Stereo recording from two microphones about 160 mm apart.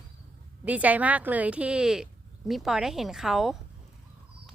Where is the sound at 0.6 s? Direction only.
10° right (ahead or behind).